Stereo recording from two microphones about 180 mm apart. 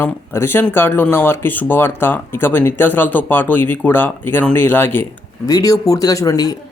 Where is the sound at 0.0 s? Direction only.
10° left (ahead or behind).